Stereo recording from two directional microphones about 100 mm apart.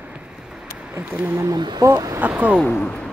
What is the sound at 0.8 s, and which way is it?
Speech, 15° right (ahead or behind).